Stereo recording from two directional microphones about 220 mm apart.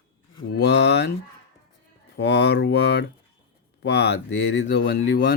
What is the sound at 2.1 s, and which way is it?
Speech, 50° left (ahead or behind).